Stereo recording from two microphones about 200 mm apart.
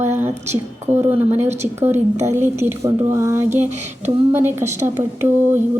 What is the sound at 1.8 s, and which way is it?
A woman's voice, 10° right (ahead or behind).